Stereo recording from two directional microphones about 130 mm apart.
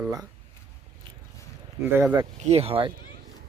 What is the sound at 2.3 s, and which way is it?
Speech, 55° right (ahead or behind).